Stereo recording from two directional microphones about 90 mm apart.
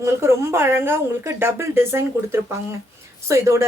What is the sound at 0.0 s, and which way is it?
A woman's voice, 30° right (ahead or behind).